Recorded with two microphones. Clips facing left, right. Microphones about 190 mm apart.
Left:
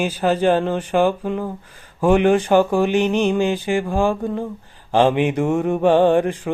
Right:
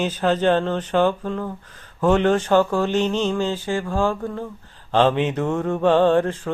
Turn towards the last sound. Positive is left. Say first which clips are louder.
# left 2 dB
turn(degrees=15)  # may be behind; listen again after turning